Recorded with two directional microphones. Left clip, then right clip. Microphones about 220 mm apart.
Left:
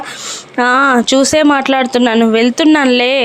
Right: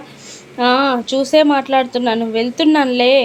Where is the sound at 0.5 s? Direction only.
25° left (ahead or behind).